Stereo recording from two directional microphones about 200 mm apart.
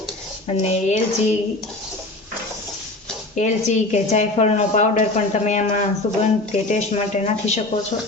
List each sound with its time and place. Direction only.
0.4 s speech: 35° left (ahead or behind)
3.3 s speech: 35° left (ahead or behind)